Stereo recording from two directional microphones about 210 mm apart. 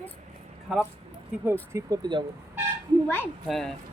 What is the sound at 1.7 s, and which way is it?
Speech, 20° right (ahead or behind).